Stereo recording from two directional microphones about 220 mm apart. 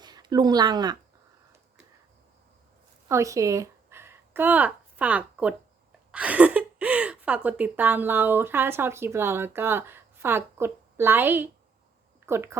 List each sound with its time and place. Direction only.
0.0 s speech: 20° right (ahead or behind)
3.1 s a woman's voice: 15° right (ahead or behind)